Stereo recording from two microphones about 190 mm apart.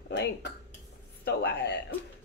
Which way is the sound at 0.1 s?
65° left (ahead or behind).